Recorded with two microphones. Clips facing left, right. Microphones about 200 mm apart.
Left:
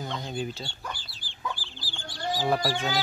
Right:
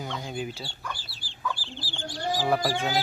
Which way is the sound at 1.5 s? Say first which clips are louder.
Right 5 dB; 30° right (ahead or behind).